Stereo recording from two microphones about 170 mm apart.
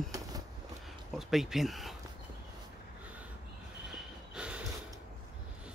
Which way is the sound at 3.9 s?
5° right (ahead or behind).